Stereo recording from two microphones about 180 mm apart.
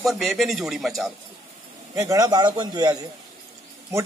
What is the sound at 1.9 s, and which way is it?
A man's voice, 20° right (ahead or behind).